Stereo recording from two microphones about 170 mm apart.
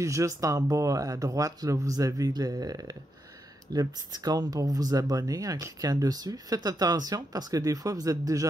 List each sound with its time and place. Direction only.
0.0 s speech: 20° right (ahead or behind)